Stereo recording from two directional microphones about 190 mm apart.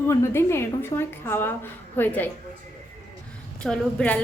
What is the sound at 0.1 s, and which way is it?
A woman's voice, 15° left (ahead or behind).